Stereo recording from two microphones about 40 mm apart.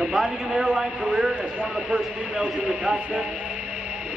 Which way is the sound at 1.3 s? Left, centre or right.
Right.